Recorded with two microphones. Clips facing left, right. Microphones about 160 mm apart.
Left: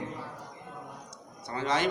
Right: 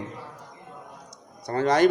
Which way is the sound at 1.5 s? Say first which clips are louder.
Right 9 dB; 45° right (ahead or behind).